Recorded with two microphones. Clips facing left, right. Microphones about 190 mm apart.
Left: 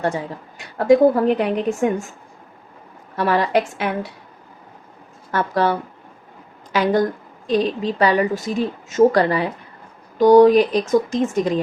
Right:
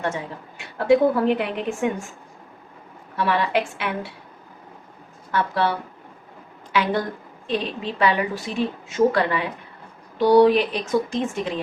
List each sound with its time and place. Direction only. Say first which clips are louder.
0.8 s a woman's voice: left 4 dB; 40° left (ahead or behind)
3.2 s a woman's voice: left 4 dB; 40° left (ahead or behind)
5.3 s speech: left 3 dB; 45° left (ahead or behind)
6.7 s a woman's voice: left 5 dB; 45° left (ahead or behind)